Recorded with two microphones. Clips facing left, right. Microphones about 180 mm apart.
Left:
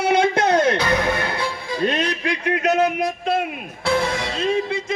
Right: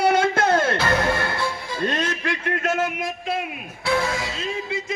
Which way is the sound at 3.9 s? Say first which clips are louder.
Left 2 dB; 40° left (ahead or behind).